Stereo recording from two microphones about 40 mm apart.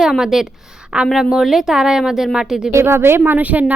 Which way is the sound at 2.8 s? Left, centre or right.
Right.